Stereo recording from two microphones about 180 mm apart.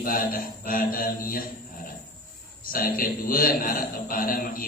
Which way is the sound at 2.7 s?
55° left (ahead or behind).